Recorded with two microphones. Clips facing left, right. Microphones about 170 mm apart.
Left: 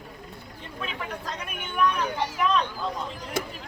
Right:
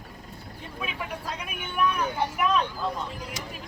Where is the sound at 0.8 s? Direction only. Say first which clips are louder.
Even; 10° right (ahead or behind).